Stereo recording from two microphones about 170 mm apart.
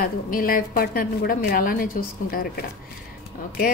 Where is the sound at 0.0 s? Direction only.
55° left (ahead or behind).